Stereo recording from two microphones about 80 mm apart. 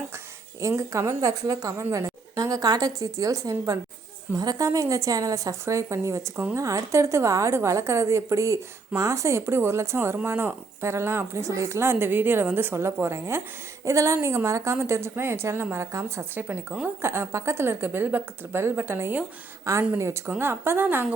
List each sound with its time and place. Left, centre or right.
0.8 s a woman's voice: right
16.3 s a woman's voice: right
19.7 s a woman's voice: right